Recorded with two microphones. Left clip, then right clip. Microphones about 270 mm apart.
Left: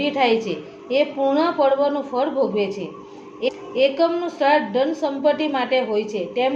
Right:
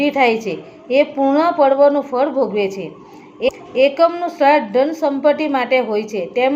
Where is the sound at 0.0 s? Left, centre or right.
Right.